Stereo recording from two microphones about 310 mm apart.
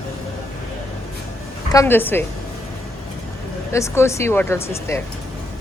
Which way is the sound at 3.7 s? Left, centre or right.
Centre.